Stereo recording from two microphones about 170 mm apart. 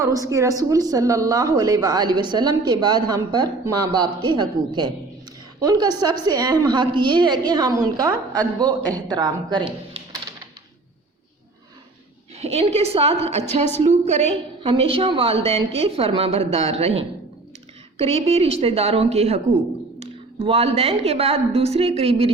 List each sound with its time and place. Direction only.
0.0 s a woman's voice: 20° right (ahead or behind)
12.4 s a woman's voice: 40° right (ahead or behind)